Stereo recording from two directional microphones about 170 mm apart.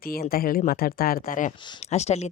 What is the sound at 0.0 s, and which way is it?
Speech, 60° left (ahead or behind).